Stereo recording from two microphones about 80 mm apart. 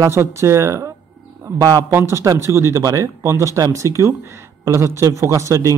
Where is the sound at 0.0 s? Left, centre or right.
Right.